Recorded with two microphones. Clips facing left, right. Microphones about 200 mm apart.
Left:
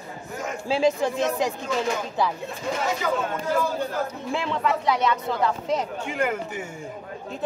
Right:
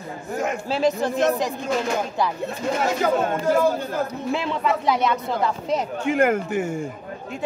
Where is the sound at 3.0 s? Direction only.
50° right (ahead or behind).